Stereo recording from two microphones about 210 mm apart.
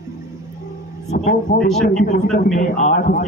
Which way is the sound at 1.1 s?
35° left (ahead or behind).